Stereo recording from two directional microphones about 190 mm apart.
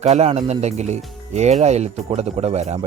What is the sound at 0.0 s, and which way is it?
Speech, 35° right (ahead or behind).